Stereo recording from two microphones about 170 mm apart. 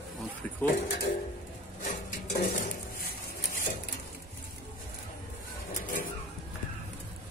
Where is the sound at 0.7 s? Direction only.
65° left (ahead or behind).